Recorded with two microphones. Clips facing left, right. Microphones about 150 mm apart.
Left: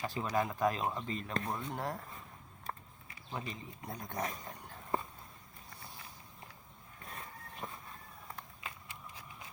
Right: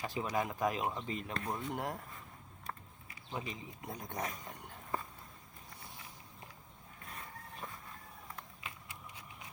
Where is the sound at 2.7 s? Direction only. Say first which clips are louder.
Left 2 dB; 30° left (ahead or behind).